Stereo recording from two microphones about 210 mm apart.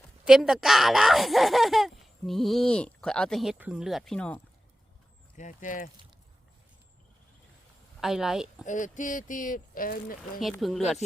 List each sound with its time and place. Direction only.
0.3 s speech: 5° right (ahead or behind)
5.4 s speech: 35° left (ahead or behind)
8.0 s speech: centre (ahead or behind)
8.6 s speech: 35° left (ahead or behind)
10.4 s speech: centre (ahead or behind)